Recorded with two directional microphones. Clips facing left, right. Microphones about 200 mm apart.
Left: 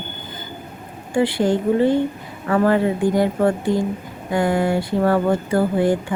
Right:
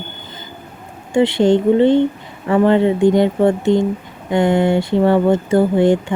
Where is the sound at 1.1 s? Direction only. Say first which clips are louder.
Right 5 dB; 25° right (ahead or behind).